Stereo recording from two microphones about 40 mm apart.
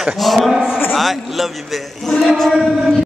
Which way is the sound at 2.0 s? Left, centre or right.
Centre.